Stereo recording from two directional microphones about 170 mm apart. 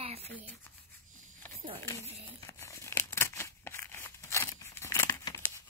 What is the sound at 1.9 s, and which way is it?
Crumpling, 20° left (ahead or behind).